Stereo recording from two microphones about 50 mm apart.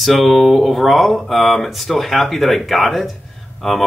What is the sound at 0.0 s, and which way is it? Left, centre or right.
Speech, centre.